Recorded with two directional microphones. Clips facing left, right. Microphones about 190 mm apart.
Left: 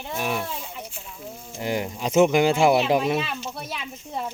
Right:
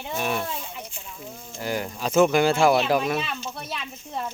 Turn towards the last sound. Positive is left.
turn(degrees=5)  # may be behind; listen again after turning